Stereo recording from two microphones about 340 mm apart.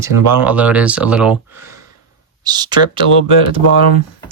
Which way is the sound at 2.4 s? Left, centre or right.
Centre.